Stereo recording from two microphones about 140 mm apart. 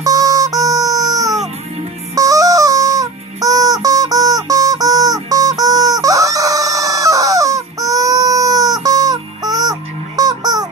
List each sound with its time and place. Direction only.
0.0 s music: 25° right (ahead or behind)